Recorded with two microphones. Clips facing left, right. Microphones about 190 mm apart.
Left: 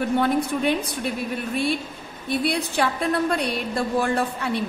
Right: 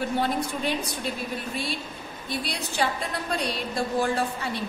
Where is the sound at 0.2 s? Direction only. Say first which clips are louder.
Left 5 dB; 60° left (ahead or behind).